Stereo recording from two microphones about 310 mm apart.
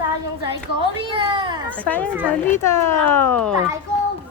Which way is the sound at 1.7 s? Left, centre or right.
Centre.